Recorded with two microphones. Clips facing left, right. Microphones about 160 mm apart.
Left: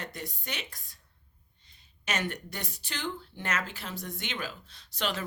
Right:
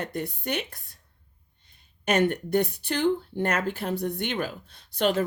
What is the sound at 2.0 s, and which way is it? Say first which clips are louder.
Speech: right 11 dB; 55° right (ahead or behind).